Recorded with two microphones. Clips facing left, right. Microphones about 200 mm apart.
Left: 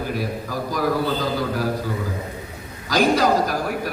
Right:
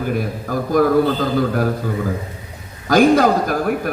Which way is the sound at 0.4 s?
55° right (ahead or behind).